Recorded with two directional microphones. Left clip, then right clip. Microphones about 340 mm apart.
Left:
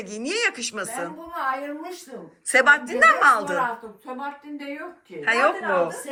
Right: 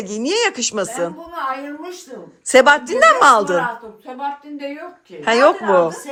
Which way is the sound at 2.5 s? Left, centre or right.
Centre.